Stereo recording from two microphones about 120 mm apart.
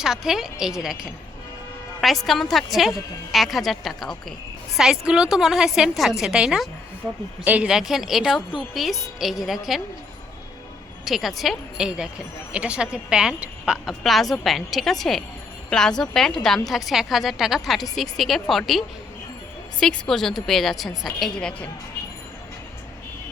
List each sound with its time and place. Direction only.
0.0 s a woman's voice: 5° right (ahead or behind)
11.0 s a woman's voice: centre (ahead or behind)